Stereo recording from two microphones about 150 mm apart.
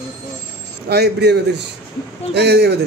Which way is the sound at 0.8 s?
90° right.